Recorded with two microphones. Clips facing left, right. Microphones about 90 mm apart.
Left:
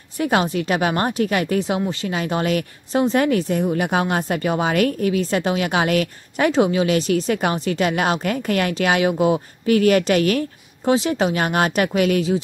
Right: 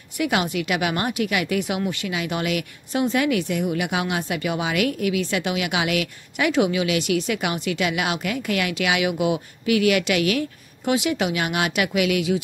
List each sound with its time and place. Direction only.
0.2 s speech: 35° left (ahead or behind)